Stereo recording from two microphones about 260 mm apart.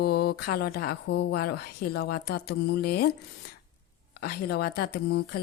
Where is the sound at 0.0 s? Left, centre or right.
Left.